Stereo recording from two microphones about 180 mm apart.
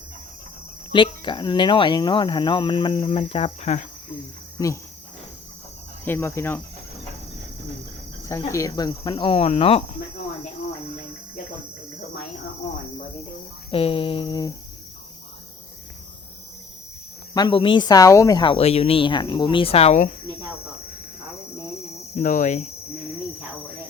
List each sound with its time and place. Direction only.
0.9 s speech: 25° left (ahead or behind)
4.5 s speech: 20° left (ahead or behind)
6.1 s cricket: 15° left (ahead or behind)
8.2 s speech: 15° left (ahead or behind); by 9.8 s 30° left (ahead or behind)
13.7 s speech: 30° left (ahead or behind)
17.3 s speech: 25° left (ahead or behind)
22.1 s cricket: 45° left (ahead or behind)